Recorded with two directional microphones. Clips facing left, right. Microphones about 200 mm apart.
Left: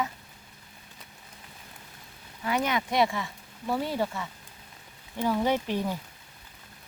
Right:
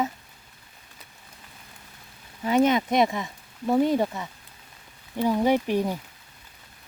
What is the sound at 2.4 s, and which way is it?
Speech, 25° right (ahead or behind).